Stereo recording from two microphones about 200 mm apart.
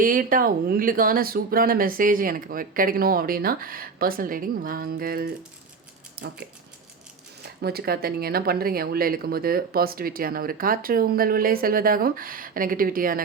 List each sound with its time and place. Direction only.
0.0 s speech: 45° right (ahead or behind)
7.6 s speech: 50° right (ahead or behind)